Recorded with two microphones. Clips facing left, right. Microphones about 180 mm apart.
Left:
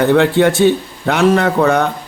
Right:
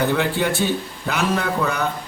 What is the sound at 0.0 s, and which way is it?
A man's voice, 65° left (ahead or behind).